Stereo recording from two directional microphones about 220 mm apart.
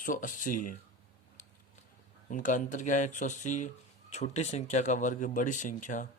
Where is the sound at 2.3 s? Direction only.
35° left (ahead or behind).